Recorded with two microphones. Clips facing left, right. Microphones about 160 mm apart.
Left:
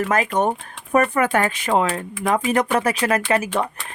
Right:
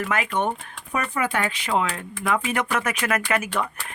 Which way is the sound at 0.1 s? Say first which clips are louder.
Left 4 dB; 40° left (ahead or behind).